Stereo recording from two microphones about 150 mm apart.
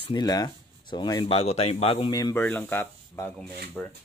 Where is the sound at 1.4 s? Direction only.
45° left (ahead or behind).